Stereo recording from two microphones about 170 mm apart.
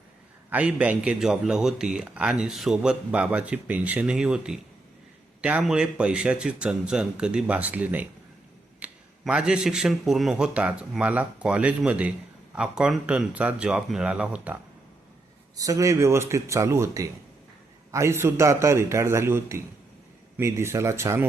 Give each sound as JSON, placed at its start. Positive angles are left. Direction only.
{"t": 0.5, "sound": "a man's voice", "side_deg": -5}
{"t": 15.5, "sound": "a man's voice", "side_deg": -20}